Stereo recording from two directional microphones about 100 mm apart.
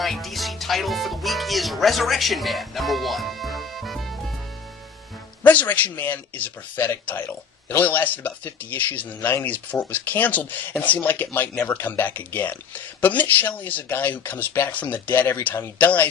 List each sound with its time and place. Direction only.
0.0 s speech: centre (ahead or behind)
5.4 s speech: 15° left (ahead or behind)